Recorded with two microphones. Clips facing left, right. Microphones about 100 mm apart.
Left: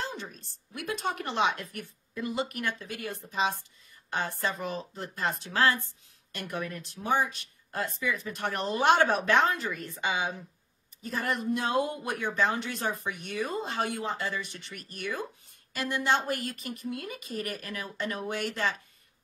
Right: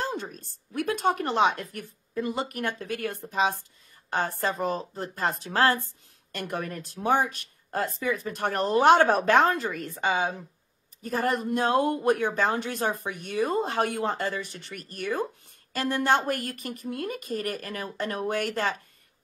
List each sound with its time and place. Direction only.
0.0 s speech: 45° right (ahead or behind)